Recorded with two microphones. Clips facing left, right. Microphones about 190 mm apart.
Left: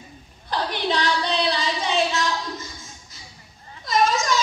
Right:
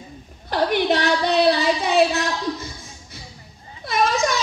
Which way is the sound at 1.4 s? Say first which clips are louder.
Right 6 dB; 65° right (ahead or behind).